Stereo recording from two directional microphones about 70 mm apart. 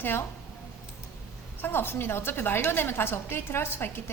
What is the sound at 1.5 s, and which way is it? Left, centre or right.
A woman's voice, left.